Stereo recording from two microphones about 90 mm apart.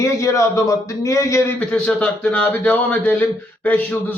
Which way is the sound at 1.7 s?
15° left (ahead or behind).